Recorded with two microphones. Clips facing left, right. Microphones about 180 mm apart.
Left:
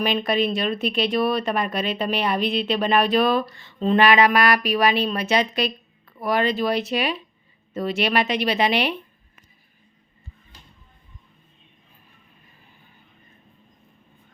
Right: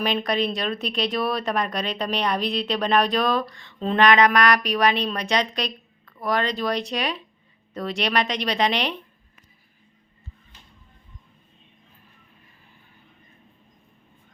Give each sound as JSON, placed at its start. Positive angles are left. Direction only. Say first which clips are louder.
{"t": 0.0, "sound": "speech", "louder": "left 2 dB", "side_deg": 0}